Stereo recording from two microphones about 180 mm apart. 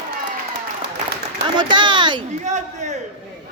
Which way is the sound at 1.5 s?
25° right (ahead or behind).